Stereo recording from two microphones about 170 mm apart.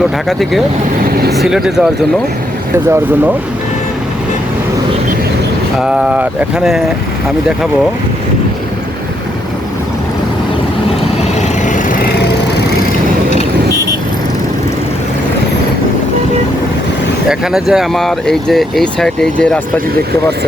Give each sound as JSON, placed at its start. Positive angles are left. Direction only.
{"t": 0.0, "sound": "speech", "side_deg": 0}
{"t": 2.7, "sound": "speech", "side_deg": -15}
{"t": 5.8, "sound": "speech", "side_deg": -5}
{"t": 11.2, "sound": "vehicle", "side_deg": 45}
{"t": 17.2, "sound": "speech", "side_deg": -5}